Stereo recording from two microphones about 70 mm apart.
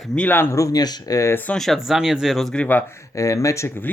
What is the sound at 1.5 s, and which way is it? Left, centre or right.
Speech, centre.